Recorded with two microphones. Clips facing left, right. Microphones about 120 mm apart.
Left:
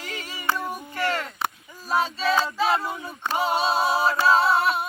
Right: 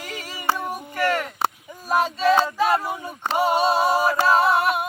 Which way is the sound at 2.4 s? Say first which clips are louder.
Right 3 dB; 15° right (ahead or behind).